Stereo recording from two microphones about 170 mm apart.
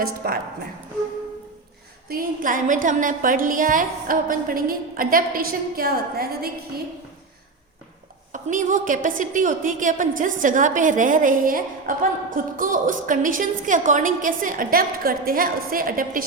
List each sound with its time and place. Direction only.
0.2 s a woman's voice: 65° right (ahead or behind)
2.0 s a woman's voice: 55° right (ahead or behind)
8.3 s a woman's voice: 50° right (ahead or behind)